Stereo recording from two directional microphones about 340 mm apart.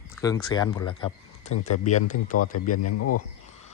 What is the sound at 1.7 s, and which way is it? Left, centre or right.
Speech, left.